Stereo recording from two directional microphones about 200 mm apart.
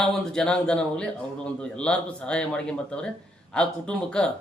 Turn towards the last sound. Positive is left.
turn(degrees=5)  # may be behind; listen again after turning